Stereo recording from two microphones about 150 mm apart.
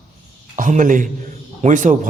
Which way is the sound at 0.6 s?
60° right (ahead or behind).